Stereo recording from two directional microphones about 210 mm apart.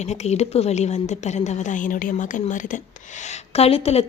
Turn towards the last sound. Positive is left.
turn(degrees=30)  # may be behind; listen again after turning